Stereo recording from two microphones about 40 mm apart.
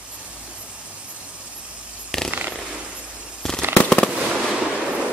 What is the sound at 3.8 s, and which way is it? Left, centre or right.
Fireworks, left.